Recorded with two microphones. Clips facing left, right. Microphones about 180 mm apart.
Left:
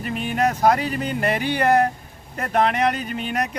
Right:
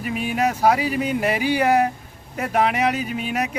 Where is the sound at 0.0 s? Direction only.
5° right (ahead or behind).